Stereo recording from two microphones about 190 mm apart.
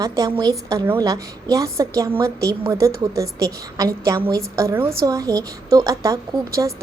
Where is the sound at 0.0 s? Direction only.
20° right (ahead or behind).